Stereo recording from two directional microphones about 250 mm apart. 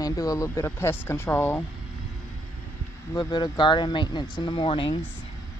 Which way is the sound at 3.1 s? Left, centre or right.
Centre.